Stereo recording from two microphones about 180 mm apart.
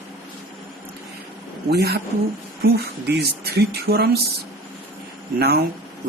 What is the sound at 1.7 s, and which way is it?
Speech, 65° right (ahead or behind).